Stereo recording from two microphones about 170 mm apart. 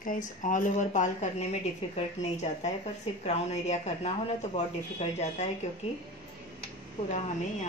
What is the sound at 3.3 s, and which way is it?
Speech, 40° left (ahead or behind).